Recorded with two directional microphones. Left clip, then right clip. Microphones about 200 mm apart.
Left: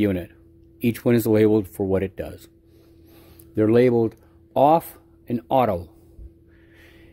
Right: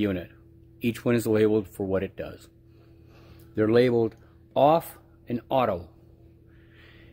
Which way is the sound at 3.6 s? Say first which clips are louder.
Left 4 dB; 30° left (ahead or behind).